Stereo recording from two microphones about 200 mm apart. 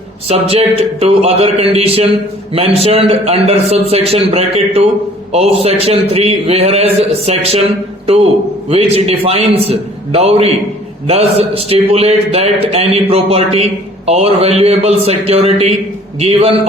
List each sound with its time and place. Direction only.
0.3 s a man's voice: 30° right (ahead or behind)